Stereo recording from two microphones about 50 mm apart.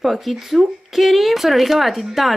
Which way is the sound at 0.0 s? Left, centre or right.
Centre.